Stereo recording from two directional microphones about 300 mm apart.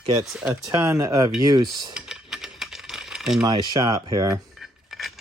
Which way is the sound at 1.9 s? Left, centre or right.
Centre.